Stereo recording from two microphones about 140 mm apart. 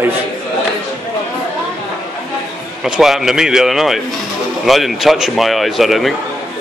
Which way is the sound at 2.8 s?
5° right (ahead or behind).